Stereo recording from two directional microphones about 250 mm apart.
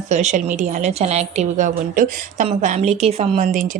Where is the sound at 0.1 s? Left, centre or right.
Right.